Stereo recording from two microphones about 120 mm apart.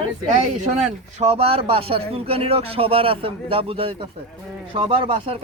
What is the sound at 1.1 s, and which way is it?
A man's voice, 60° right (ahead or behind).